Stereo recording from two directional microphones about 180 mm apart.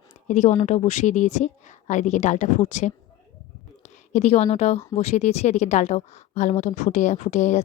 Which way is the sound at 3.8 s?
40° left (ahead or behind).